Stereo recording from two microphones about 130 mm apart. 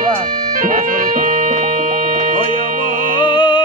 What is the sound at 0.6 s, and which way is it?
Music, 90° right.